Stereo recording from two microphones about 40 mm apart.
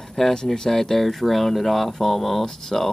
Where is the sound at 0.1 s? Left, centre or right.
Centre.